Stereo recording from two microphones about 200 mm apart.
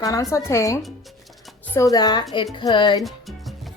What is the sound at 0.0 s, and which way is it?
A woman's voice, 15° left (ahead or behind).